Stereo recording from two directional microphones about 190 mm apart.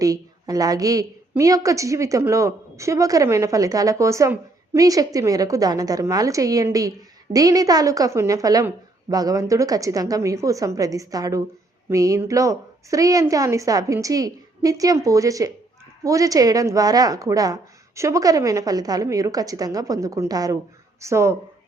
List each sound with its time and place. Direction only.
0.0 s a woman's voice: 20° right (ahead or behind)